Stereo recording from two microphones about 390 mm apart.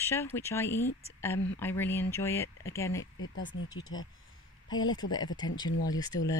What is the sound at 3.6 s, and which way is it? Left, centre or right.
Speech, left.